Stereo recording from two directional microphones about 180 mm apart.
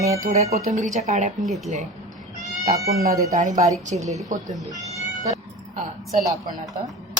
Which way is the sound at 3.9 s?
35° right (ahead or behind).